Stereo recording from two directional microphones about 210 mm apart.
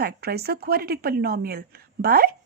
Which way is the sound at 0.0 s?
50° right (ahead or behind).